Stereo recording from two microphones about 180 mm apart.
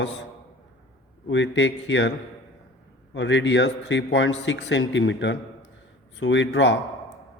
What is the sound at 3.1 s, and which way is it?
Speech, 90° left.